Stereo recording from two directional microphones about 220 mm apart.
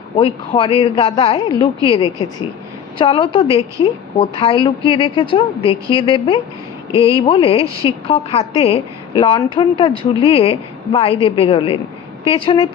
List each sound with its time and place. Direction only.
0.2 s a woman's voice: 25° left (ahead or behind)
6.9 s speech: 15° right (ahead or behind)
7.2 s a woman's voice: 25° left (ahead or behind)
7.6 s speech: 15° right (ahead or behind)
7.9 s a woman's voice: 25° left (ahead or behind)